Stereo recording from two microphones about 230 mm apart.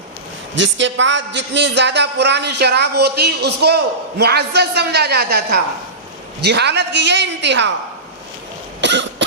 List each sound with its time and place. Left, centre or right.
0.5 s speech: right
8.8 s cough: right